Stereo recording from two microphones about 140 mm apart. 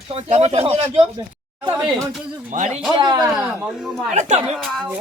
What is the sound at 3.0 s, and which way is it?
Speech, 30° right (ahead or behind).